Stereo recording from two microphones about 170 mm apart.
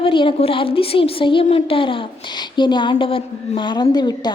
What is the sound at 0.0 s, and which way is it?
A woman's voice, 30° left (ahead or behind).